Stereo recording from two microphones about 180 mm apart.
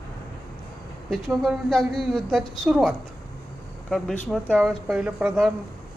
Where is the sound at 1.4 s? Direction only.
Centre (ahead or behind).